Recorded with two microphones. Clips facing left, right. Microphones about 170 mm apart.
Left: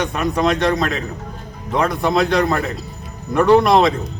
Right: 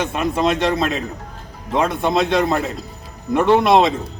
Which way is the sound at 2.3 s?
5° right (ahead or behind).